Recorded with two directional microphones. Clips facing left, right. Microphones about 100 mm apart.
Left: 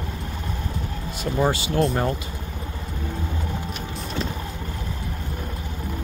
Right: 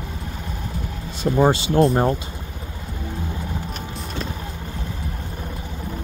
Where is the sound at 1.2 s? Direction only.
25° right (ahead or behind).